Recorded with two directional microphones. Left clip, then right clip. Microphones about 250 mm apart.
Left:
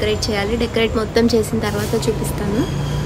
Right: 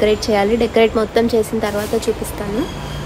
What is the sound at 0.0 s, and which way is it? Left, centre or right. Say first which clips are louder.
A woman's voice: right 5 dB; centre.